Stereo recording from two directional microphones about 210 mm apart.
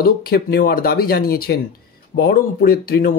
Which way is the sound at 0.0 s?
50° left (ahead or behind).